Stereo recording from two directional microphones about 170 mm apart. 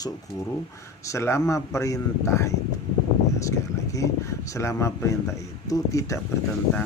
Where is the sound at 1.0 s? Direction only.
15° left (ahead or behind).